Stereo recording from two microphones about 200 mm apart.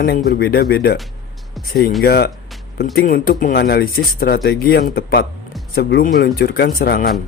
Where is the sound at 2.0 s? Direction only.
50° left (ahead or behind).